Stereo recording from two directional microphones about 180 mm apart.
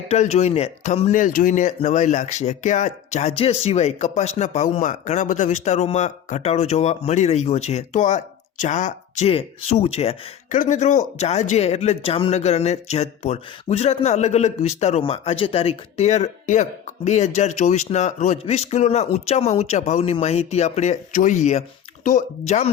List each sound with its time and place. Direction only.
0.1 s speech: 35° left (ahead or behind)